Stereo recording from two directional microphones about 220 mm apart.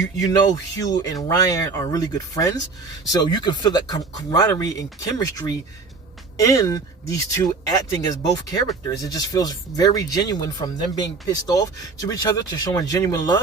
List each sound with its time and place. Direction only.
0.8 s speech: 15° left (ahead or behind)